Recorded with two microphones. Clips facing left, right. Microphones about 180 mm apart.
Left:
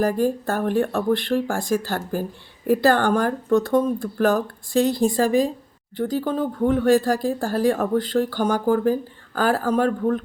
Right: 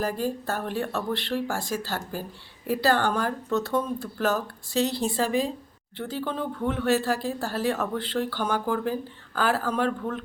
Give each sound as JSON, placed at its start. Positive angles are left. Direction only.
{"t": 0.0, "sound": "speech", "side_deg": 50}